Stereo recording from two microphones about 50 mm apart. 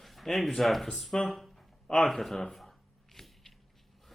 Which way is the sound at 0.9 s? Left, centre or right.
Centre.